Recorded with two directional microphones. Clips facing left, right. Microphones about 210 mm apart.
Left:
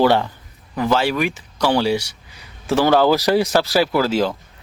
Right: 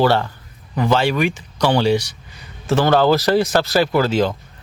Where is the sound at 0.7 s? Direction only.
Centre (ahead or behind).